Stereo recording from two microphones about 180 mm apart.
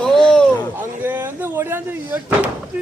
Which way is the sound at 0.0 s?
5° left (ahead or behind).